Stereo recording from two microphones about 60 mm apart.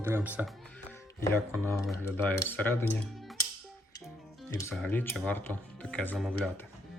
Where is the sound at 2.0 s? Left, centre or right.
Left.